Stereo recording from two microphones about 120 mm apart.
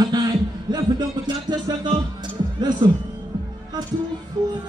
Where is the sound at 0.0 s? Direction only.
35° right (ahead or behind).